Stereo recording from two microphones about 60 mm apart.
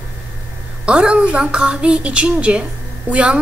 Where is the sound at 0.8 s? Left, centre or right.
Centre.